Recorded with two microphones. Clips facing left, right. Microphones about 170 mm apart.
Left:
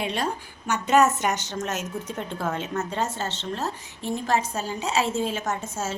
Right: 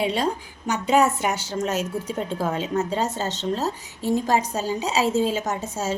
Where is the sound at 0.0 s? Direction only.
10° right (ahead or behind).